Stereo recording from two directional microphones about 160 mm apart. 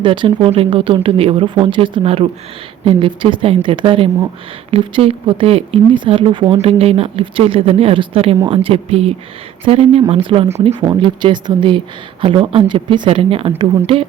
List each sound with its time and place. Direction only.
0.0 s speech: 35° right (ahead or behind)